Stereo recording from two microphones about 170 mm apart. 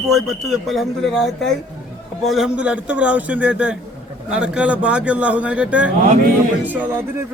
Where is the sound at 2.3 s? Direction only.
5° right (ahead or behind).